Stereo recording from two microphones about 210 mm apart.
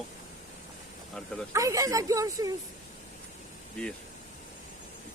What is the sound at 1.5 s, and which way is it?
Speech, 15° right (ahead or behind).